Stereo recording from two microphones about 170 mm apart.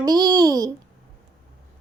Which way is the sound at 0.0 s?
25° right (ahead or behind).